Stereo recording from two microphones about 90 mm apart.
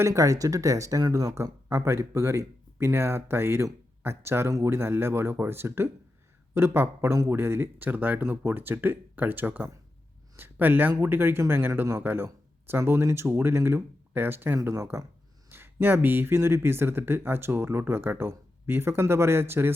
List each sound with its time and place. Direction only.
0.0 s speech: 35° right (ahead or behind)